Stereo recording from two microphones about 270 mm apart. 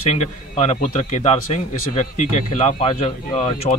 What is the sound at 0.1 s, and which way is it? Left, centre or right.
Speech, left.